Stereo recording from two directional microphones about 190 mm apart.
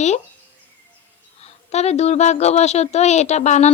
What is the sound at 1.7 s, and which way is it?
Speech, 35° left (ahead or behind).